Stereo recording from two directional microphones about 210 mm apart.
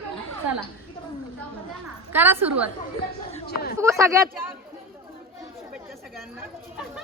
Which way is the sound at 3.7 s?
15° right (ahead or behind).